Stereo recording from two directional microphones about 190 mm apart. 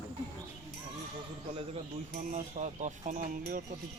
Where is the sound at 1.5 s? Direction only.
30° right (ahead or behind).